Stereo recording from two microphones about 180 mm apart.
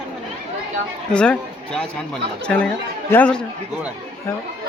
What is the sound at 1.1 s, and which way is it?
Speech, 5° left (ahead or behind).